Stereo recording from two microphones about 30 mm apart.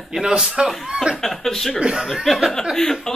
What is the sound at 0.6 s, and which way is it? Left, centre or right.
Speech, right.